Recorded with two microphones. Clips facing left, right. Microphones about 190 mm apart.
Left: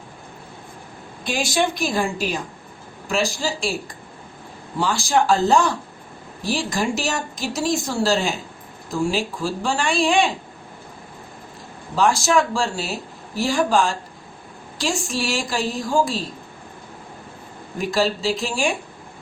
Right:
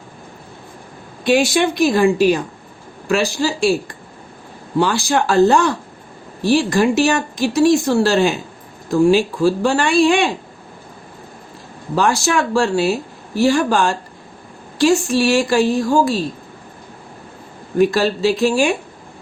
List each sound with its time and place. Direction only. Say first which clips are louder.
1.2 s speech: right 7 dB; 65° right (ahead or behind)
11.9 s speech: right 1 dB; 60° right (ahead or behind)
17.7 s speech: right 7 dB; 65° right (ahead or behind)